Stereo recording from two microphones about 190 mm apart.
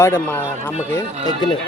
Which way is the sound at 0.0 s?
10° left (ahead or behind).